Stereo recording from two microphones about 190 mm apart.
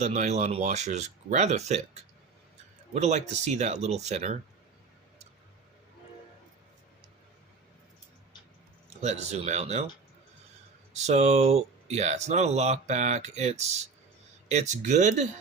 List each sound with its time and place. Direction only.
0.0 s speech: 35° right (ahead or behind)
8.9 s speech: 35° right (ahead or behind)
10.9 s speech: 35° right (ahead or behind)